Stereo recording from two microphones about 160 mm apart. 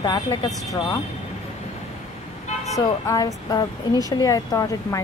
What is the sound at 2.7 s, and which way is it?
A woman's voice, 20° left (ahead or behind).